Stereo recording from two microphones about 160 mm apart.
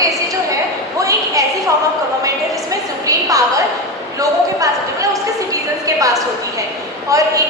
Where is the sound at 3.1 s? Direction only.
20° right (ahead or behind).